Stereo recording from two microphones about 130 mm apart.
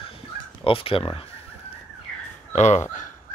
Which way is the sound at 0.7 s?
45° left (ahead or behind).